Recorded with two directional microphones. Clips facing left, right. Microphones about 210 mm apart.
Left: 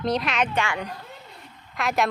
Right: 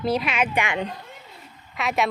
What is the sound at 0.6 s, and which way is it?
Speech, 20° right (ahead or behind).